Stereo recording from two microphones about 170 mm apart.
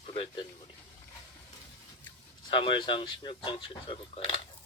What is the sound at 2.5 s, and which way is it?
Speech, 30° left (ahead or behind).